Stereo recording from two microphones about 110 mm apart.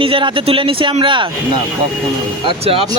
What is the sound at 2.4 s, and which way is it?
Speech, 55° right (ahead or behind).